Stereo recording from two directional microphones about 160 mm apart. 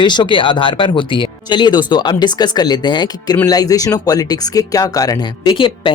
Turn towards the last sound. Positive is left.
turn(degrees=30)  # may be behind; listen again after turning